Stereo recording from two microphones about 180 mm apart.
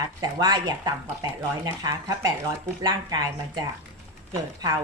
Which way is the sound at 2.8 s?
20° right (ahead or behind).